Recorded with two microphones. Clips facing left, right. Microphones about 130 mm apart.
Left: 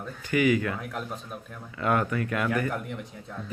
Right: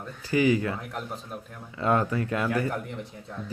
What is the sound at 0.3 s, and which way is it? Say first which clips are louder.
Speech: right 1 dB; 30° right (ahead or behind).